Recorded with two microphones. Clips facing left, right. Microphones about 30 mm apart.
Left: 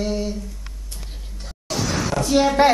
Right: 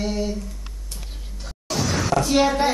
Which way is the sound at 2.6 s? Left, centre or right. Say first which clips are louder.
Left 6 dB; left.